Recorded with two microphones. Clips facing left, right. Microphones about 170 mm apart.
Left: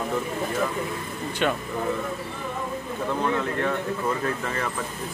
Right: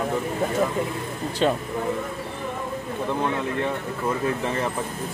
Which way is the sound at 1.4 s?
30° right (ahead or behind).